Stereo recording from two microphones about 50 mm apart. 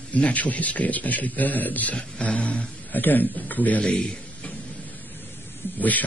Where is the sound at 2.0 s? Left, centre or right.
Left.